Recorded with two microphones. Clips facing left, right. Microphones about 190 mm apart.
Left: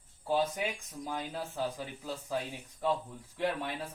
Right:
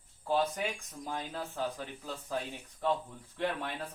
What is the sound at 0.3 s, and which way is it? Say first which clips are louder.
Speech: even; 10° left (ahead or behind).